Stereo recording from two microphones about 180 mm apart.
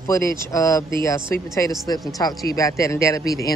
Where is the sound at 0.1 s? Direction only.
20° left (ahead or behind).